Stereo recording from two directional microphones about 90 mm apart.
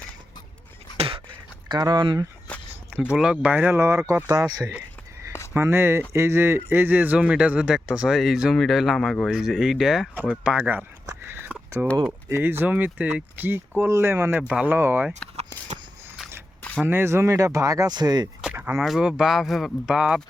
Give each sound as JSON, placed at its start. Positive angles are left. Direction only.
{"t": 1.6, "sound": "speech", "side_deg": -50}
{"t": 3.0, "sound": "speech", "side_deg": -10}
{"t": 5.5, "sound": "speech", "side_deg": -30}
{"t": 11.1, "sound": "a sound", "side_deg": -25}
{"t": 12.3, "sound": "speech", "side_deg": -25}
{"t": 16.8, "sound": "speech", "side_deg": -25}
{"t": 17.9, "sound": "speech", "side_deg": -50}
{"t": 18.8, "sound": "speech", "side_deg": -5}